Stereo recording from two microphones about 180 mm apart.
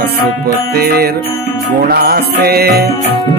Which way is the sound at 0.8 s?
60° right (ahead or behind).